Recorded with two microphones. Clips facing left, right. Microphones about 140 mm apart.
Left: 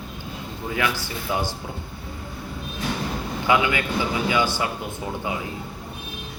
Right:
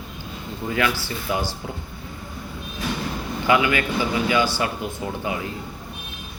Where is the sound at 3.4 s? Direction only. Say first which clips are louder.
Right 2 dB; 20° left (ahead or behind).